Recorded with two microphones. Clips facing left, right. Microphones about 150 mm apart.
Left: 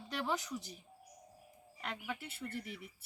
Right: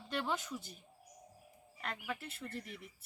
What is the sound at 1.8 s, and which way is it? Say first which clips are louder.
Speech: even; 5° left (ahead or behind).